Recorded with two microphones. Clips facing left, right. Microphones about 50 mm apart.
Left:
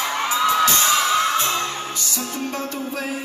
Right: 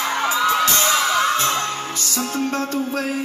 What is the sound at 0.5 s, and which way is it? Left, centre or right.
Music, right.